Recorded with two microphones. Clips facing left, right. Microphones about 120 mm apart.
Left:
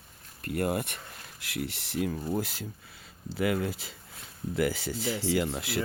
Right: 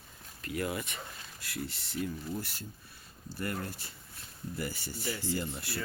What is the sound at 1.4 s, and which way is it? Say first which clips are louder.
Speech: left 5 dB; 70° left (ahead or behind).